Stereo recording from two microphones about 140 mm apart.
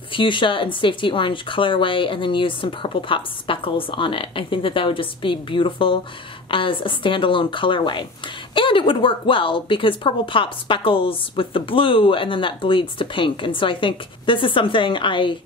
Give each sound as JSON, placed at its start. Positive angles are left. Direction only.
{"t": 0.1, "sound": "speech", "side_deg": 35}